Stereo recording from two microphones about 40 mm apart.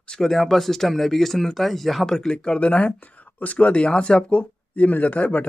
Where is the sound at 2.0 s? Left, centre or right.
Centre.